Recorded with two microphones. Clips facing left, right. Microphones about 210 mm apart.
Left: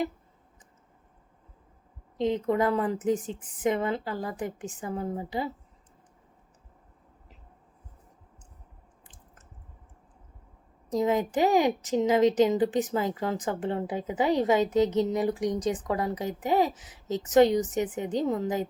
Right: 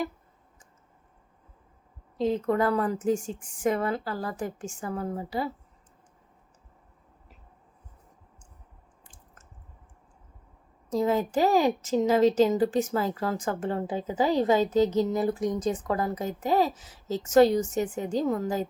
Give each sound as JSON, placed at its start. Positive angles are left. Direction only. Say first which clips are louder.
{"t": 2.1, "sound": "a woman's voice", "louder": "even", "side_deg": 20}
{"t": 10.8, "sound": "a woman's voice", "louder": "even", "side_deg": 15}